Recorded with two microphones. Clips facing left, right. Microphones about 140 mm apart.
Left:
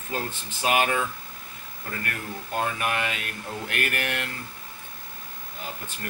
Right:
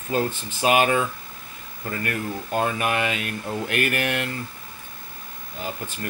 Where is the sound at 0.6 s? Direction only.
15° right (ahead or behind).